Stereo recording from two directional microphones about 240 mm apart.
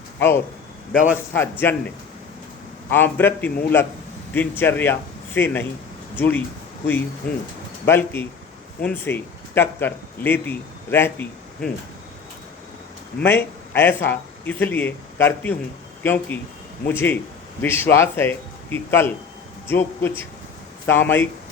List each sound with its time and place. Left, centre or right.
0.2 s a man's voice: centre
2.9 s a man's voice: centre
7.9 s a man's voice: centre
13.1 s a man's voice: centre